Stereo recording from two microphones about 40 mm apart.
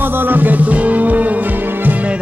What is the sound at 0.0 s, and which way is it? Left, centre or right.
Music, right.